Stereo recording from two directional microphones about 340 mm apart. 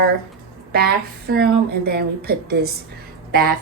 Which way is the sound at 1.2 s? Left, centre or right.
Right.